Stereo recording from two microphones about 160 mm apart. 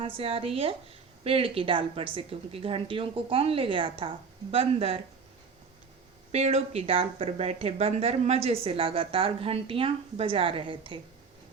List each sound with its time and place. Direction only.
0.2 s speech: 35° right (ahead or behind)
6.3 s speech: 40° right (ahead or behind)